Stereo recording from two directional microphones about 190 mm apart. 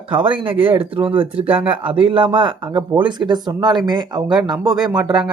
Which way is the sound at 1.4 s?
10° right (ahead or behind).